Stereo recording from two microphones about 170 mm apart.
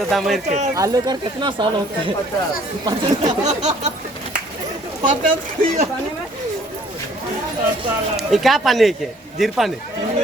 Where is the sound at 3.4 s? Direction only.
40° right (ahead or behind).